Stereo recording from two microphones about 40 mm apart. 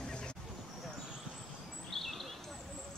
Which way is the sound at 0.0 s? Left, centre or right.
Left.